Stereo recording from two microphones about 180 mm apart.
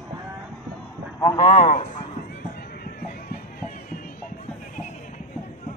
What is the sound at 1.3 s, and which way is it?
Speech, 35° left (ahead or behind).